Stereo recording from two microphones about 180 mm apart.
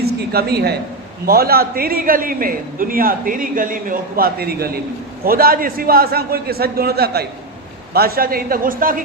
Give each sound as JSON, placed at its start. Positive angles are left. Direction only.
{"t": 0.0, "sound": "a woman's voice", "side_deg": -60}